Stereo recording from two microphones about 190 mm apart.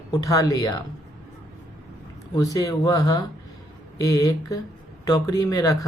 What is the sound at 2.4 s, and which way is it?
Speech, 20° left (ahead or behind).